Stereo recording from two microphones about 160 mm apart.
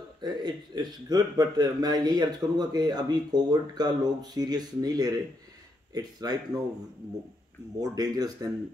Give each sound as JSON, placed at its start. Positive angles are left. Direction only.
{"t": 0.2, "sound": "a man's voice", "side_deg": -25}
{"t": 7.8, "sound": "a man's voice", "side_deg": -25}